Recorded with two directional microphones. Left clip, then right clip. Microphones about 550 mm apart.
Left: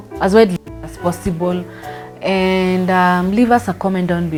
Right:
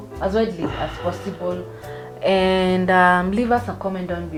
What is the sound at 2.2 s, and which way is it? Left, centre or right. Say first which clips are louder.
Speech: left 1 dB; left.